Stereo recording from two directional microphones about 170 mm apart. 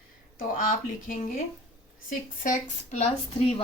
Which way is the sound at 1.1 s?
55° left (ahead or behind).